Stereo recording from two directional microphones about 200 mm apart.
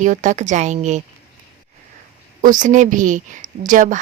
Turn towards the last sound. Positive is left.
turn(degrees=-40)  # may be behind; listen again after turning